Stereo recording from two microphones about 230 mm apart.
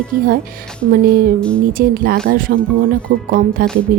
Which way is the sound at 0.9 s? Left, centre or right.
Right.